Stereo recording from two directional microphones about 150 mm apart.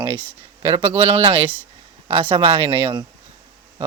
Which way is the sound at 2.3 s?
40° right (ahead or behind).